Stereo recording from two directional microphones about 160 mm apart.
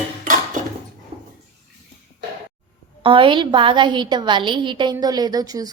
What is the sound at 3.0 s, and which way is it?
A woman's voice, 30° right (ahead or behind).